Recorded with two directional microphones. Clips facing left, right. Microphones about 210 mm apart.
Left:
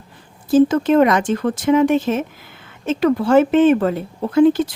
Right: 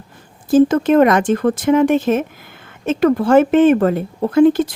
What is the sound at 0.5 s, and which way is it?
Speech, 50° right (ahead or behind).